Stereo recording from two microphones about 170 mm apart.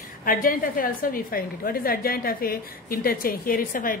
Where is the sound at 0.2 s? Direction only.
55° left (ahead or behind).